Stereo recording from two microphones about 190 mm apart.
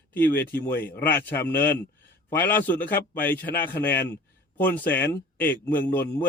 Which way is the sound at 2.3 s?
10° left (ahead or behind).